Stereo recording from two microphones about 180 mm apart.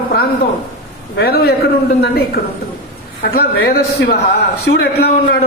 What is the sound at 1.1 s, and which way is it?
A man's voice, 60° left (ahead or behind).